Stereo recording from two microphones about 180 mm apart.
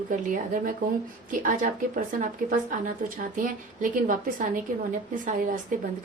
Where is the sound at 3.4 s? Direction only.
50° right (ahead or behind).